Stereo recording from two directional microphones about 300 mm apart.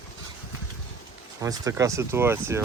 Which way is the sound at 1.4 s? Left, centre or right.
Centre.